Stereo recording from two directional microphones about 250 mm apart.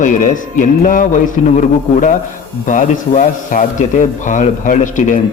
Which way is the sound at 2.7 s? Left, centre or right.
Left.